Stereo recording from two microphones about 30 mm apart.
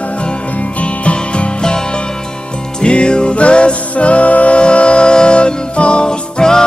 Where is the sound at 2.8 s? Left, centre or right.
Left.